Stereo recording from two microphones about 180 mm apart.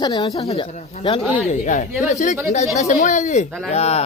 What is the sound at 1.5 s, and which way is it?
Speech, 45° left (ahead or behind).